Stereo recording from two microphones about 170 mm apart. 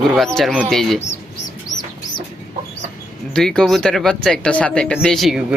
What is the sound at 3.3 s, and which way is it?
Speech, 5° left (ahead or behind).